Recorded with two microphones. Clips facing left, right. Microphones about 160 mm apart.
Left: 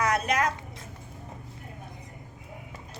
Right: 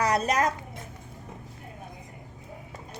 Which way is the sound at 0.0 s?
35° right (ahead or behind).